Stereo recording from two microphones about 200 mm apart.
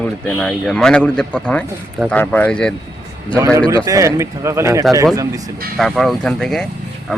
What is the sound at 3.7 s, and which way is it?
Speech, 15° right (ahead or behind).